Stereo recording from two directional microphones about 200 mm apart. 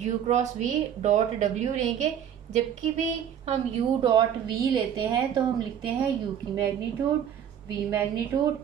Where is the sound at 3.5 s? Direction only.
25° right (ahead or behind).